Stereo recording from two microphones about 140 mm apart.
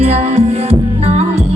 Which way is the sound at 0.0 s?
50° right (ahead or behind).